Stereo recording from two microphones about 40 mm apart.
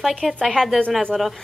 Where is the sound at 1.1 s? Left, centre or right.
Centre.